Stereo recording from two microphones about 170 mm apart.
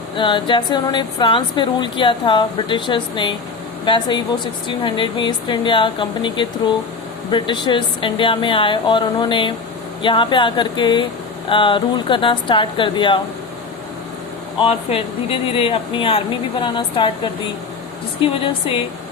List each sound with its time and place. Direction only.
0.2 s speech: 30° left (ahead or behind)
14.6 s speech: 35° left (ahead or behind)